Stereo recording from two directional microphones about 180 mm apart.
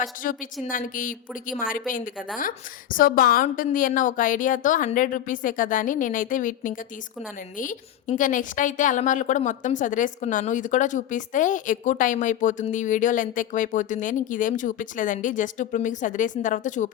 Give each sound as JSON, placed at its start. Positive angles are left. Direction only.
{"t": 0.0, "sound": "a woman's voice", "side_deg": 45}
{"t": 2.9, "sound": "a woman's voice", "side_deg": 50}